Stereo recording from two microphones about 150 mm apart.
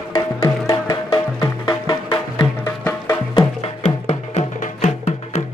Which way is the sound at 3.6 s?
40° left (ahead or behind).